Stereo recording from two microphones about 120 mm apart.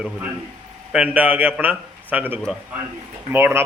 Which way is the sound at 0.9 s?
10° right (ahead or behind).